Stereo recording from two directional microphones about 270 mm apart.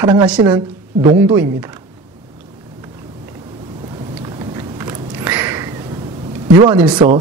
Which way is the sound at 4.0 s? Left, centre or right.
Centre.